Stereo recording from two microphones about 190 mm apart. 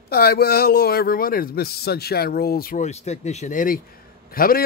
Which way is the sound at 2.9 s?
35° left (ahead or behind).